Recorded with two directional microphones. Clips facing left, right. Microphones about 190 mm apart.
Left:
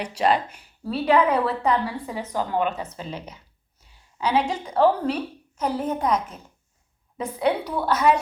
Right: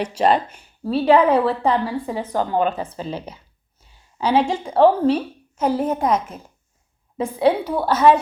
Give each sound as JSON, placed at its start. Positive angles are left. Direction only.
{"t": 0.0, "sound": "a woman's voice", "side_deg": -30}
{"t": 5.6, "sound": "a child's voice", "side_deg": -40}
{"t": 7.2, "sound": "speech", "side_deg": -30}